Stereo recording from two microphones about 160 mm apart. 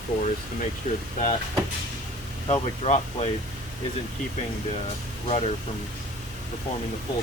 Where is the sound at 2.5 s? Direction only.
40° left (ahead or behind).